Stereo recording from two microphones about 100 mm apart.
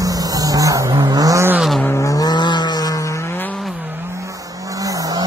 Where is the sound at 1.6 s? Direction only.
Centre (ahead or behind).